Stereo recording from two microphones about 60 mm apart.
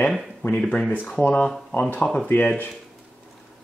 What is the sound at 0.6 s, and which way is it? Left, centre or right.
Speech, centre.